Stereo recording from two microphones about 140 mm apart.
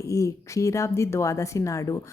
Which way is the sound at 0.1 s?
25° left (ahead or behind).